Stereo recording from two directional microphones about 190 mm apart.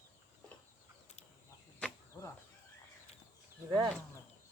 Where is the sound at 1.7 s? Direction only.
10° left (ahead or behind).